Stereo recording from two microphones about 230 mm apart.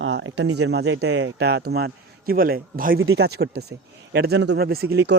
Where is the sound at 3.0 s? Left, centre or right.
Right.